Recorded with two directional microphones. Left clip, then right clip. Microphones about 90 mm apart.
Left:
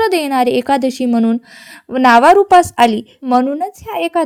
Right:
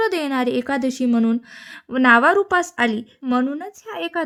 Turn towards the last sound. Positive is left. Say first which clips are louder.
# left 9 dB
turn(degrees=55)  # may be behind; listen again after turning